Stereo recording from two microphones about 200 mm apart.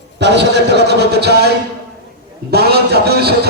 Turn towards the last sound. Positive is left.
turn(degrees=-55)  # may be behind; listen again after turning